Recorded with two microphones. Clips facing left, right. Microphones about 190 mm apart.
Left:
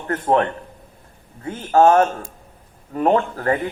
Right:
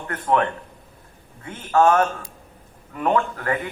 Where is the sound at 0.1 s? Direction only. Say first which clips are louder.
Left 3 dB; 35° left (ahead or behind).